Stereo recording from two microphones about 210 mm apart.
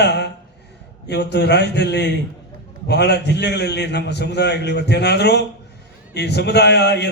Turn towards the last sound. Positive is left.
turn(degrees=55)  # may be behind; listen again after turning